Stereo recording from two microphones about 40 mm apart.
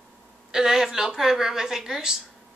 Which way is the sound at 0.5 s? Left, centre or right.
Centre.